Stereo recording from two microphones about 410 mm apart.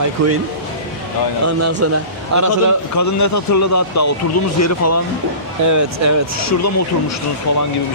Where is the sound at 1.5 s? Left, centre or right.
Right.